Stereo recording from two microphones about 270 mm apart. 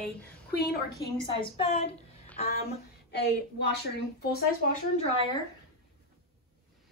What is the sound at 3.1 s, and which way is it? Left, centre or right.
A woman's voice, left.